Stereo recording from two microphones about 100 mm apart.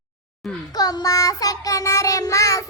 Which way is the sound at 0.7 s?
40° left (ahead or behind).